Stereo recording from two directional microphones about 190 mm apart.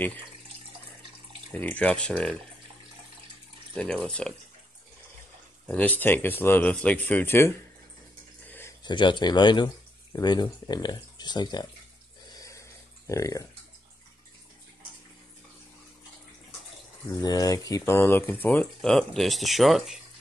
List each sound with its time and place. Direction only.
1.5 s speech: 10° left (ahead or behind)
3.7 s speech: 5° left (ahead or behind)
5.7 s speech: 10° left (ahead or behind)
8.8 s speech: 25° left (ahead or behind)
12.3 s a sound: 20° left (ahead or behind)
17.1 s speech: 20° left (ahead or behind); by 20.0 s centre (ahead or behind)